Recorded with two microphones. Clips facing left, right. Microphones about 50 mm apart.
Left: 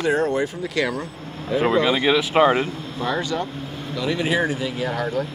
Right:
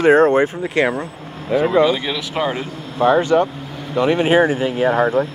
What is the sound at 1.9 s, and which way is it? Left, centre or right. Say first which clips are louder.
Speech: left 1 dB; centre.